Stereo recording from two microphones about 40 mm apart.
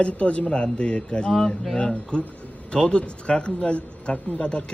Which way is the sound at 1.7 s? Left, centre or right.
Left.